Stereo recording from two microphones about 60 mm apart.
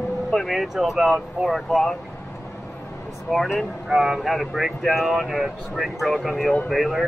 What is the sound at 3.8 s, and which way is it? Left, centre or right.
Speech, centre.